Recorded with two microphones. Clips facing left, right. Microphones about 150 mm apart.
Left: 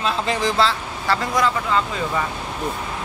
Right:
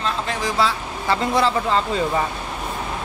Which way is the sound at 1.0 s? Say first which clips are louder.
Right 1 dB; 20° right (ahead or behind).